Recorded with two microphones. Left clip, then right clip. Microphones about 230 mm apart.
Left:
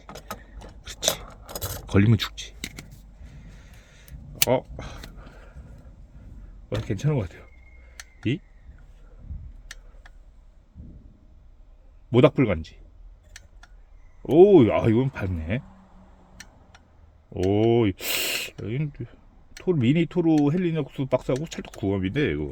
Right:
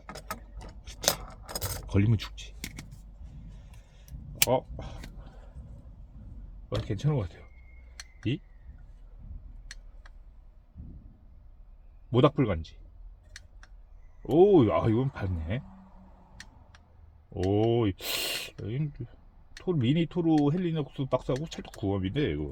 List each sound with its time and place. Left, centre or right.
0.0 s vehicle: centre
0.8 s keys jangling: left
1.0 s keys jangling: centre
1.9 s speech: left
3.6 s music: left
4.5 s speech: left
6.7 s speech: left
12.1 s speech: left
14.2 s speech: left
17.3 s speech: left